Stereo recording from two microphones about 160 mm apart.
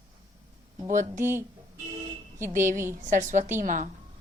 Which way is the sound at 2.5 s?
50° right (ahead or behind).